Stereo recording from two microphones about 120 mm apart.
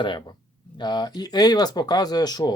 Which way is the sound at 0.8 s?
35° left (ahead or behind).